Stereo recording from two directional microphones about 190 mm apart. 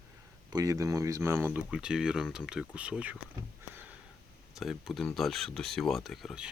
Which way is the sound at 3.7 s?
10° right (ahead or behind).